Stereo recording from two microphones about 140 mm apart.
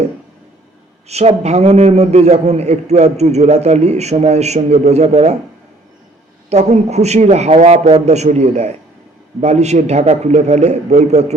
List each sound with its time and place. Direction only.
1.0 s a man's voice: 50° right (ahead or behind)
6.5 s a man's voice: 50° right (ahead or behind)